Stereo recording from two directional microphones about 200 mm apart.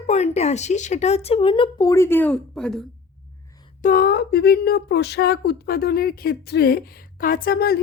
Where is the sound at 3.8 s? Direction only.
45° left (ahead or behind).